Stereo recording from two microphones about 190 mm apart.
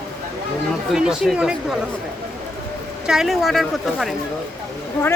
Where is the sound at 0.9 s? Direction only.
Centre (ahead or behind).